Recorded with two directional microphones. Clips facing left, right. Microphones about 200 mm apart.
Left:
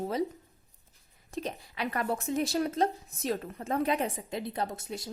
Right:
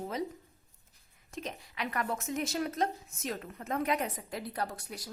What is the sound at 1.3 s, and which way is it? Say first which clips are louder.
A woman's voice: left 5 dB; 35° left (ahead or behind).